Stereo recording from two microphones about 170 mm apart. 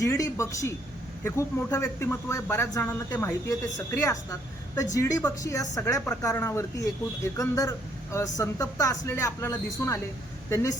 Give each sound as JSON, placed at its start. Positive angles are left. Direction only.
{"t": 0.0, "sound": "a woman's voice", "side_deg": 20}